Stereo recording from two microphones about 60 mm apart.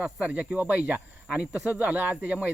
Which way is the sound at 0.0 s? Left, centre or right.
Right.